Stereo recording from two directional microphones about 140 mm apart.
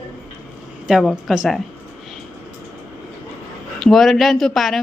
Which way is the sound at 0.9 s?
5° right (ahead or behind).